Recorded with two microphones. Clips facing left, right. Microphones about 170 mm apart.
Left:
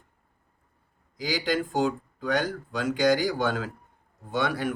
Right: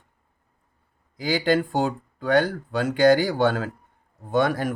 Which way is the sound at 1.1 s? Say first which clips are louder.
Right 6 dB; 55° right (ahead or behind).